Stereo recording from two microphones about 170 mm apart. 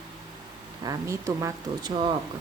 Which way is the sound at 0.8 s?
15° right (ahead or behind).